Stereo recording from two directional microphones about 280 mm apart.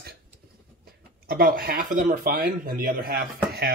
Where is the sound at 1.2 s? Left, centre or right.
Right.